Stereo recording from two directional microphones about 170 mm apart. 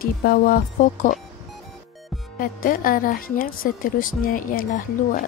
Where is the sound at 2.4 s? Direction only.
55° left (ahead or behind).